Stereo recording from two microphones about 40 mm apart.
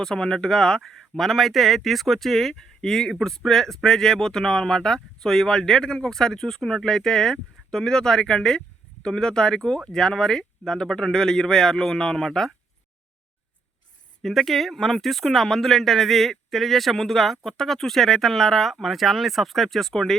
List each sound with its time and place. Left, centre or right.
0.0 s speech: centre
14.2 s speech: centre